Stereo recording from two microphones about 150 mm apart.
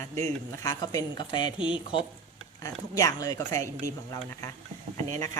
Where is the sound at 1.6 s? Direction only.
5° right (ahead or behind).